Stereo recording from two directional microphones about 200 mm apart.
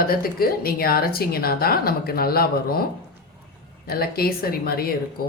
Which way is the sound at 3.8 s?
50° left (ahead or behind).